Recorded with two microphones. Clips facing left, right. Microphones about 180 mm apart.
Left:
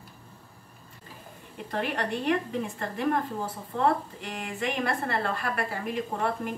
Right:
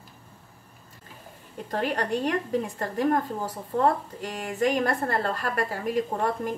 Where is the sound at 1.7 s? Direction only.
40° right (ahead or behind).